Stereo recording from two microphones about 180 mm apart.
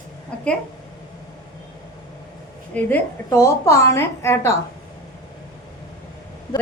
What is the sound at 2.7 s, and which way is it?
A woman's voice, 10° left (ahead or behind).